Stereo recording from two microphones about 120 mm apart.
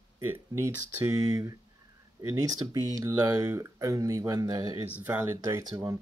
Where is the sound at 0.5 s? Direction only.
25° right (ahead or behind).